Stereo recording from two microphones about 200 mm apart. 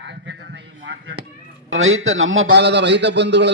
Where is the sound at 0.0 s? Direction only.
60° right (ahead or behind).